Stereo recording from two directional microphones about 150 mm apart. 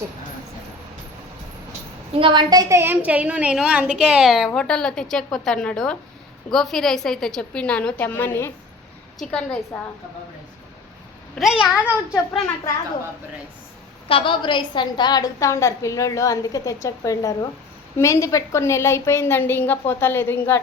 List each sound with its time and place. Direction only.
2.1 s a woman's voice: 35° right (ahead or behind); by 9.6 s 5° left (ahead or behind)
11.3 s a woman's voice: 5° right (ahead or behind)
14.1 s a woman's voice: 35° left (ahead or behind); by 20.6 s 15° left (ahead or behind)